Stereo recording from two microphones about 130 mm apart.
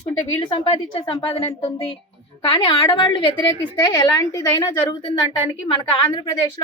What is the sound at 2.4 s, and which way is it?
A woman's voice, 40° left (ahead or behind).